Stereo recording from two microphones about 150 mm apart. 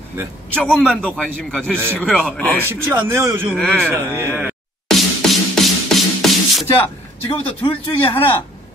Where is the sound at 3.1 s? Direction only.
15° right (ahead or behind).